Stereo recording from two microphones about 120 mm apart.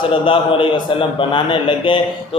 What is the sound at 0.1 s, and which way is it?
Speech, 45° left (ahead or behind).